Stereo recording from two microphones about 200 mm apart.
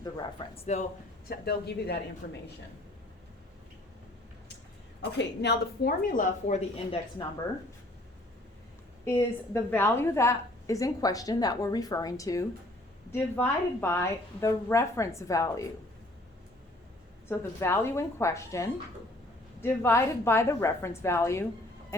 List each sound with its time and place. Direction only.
0.0 s speech: 25° left (ahead or behind)
1.3 s a woman's voice: 55° left (ahead or behind)
5.1 s a woman's voice: 55° left (ahead or behind); by 7.0 s 35° left (ahead or behind)
9.0 s a woman's voice: 10° left (ahead or behind)
17.2 s a woman's voice: 10° left (ahead or behind)